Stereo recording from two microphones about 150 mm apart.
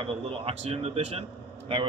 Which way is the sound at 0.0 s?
40° right (ahead or behind).